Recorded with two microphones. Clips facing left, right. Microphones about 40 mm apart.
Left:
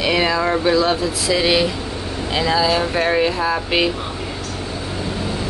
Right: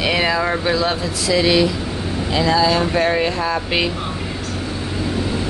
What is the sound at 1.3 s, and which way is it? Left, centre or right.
Speech, centre.